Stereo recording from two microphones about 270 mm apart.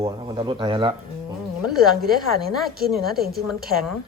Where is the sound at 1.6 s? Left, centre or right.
Centre.